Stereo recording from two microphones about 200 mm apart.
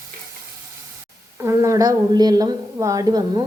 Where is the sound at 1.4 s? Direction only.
15° right (ahead or behind).